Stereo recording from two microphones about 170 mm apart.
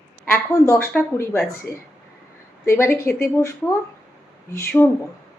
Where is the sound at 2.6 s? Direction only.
15° left (ahead or behind).